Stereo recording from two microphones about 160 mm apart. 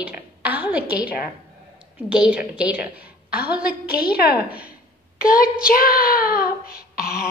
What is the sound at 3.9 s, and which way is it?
Speech, 75° left (ahead or behind).